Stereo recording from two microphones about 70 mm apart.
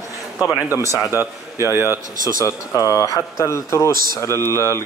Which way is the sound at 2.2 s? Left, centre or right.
Left.